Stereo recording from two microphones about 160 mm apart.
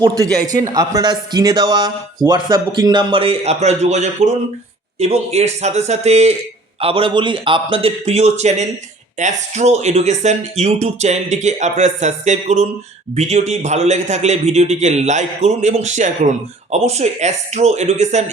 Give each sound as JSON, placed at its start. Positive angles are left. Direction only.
{"t": 0.0, "sound": "a man's voice", "side_deg": -25}